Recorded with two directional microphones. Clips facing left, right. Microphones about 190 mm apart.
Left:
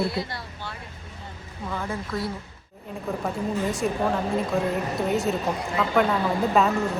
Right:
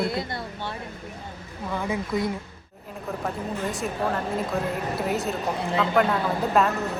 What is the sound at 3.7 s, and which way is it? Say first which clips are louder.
Speech: left 1 dB; centre (ahead or behind).